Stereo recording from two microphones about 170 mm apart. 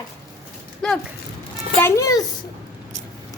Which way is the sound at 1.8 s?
20° left (ahead or behind).